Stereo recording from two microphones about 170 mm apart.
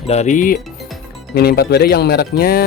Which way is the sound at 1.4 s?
70° left (ahead or behind).